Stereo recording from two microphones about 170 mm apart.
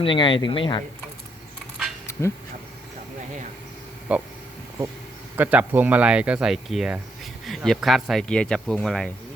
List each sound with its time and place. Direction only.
0.0 s speech: 30° left (ahead or behind)
4.1 s speech: 5° right (ahead or behind)
5.4 s speech: 10° right (ahead or behind)